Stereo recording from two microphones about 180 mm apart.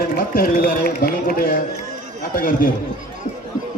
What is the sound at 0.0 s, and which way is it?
A man's voice, 55° left (ahead or behind).